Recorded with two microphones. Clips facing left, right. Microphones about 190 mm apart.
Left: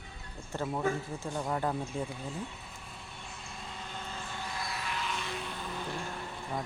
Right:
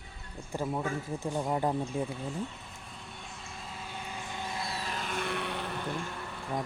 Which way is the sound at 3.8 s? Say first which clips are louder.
Right 1 dB; 10° right (ahead or behind).